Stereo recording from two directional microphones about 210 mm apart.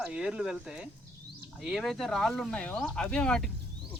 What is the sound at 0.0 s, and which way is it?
Speech, 5° right (ahead or behind).